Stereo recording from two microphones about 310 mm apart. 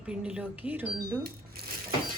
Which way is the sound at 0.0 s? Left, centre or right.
Centre.